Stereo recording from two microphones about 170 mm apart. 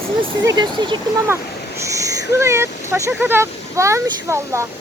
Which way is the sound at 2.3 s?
15° right (ahead or behind).